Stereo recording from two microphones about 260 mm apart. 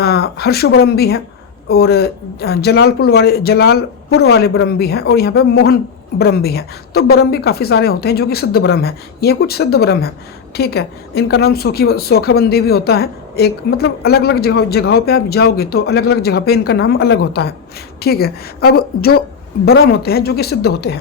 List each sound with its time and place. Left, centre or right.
0.0 s speech: left